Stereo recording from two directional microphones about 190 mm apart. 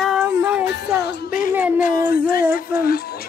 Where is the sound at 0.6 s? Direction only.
60° left (ahead or behind).